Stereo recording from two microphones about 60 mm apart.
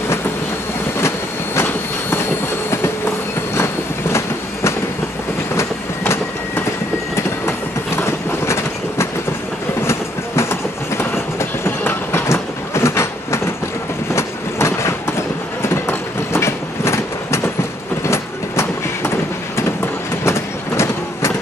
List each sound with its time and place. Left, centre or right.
1.0 s train: left
3.5 s train: left
5.6 s train: left
20.2 s vehicle: left